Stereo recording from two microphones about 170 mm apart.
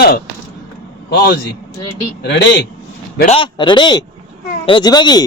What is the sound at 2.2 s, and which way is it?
Speech, 90° left.